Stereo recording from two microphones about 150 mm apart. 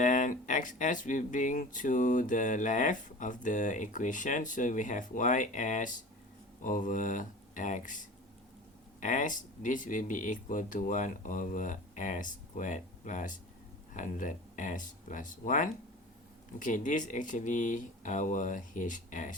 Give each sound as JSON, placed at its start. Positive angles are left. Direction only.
{"t": 0.0, "sound": "speech", "side_deg": 60}